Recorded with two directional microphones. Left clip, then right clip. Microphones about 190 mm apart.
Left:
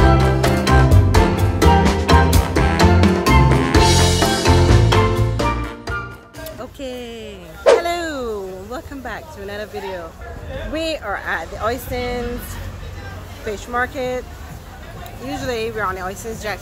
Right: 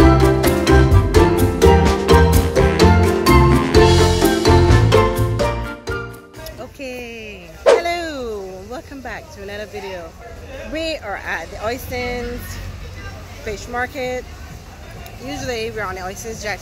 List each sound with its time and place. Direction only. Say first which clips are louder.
0.0 s music: right 3 dB; centre (ahead or behind)
6.6 s music: even; 20° left (ahead or behind)
7.8 s a sound: even; 15° left (ahead or behind)
10.7 s speech: left 1 dB; 10° left (ahead or behind)
13.5 s speech: left 2 dB; 10° left (ahead or behind)
15.2 s speech: left 1 dB; 15° left (ahead or behind)